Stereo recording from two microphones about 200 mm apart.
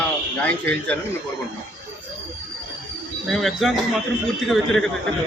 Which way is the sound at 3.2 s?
Centre (ahead or behind).